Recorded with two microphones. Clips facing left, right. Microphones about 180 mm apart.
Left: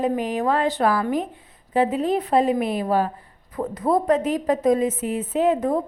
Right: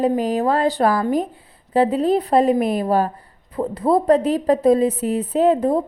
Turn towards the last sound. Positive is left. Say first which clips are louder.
# right 4 dB
turn(degrees=-30)  # may be behind; listen again after turning